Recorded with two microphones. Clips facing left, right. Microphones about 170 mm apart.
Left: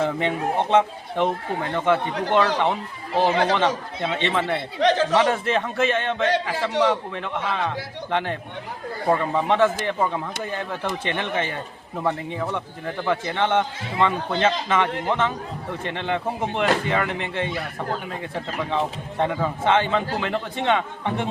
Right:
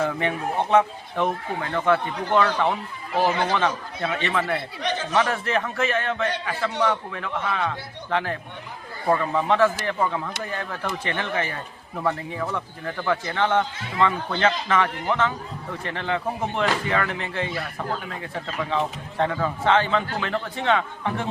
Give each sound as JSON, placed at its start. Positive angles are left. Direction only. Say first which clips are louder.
{"t": 0.0, "sound": "speech", "louder": "left 2 dB", "side_deg": 20}
{"t": 4.8, "sound": "speech", "louder": "left 9 dB", "side_deg": 90}
{"t": 5.1, "sound": "a man's voice", "louder": "left 3 dB", "side_deg": 20}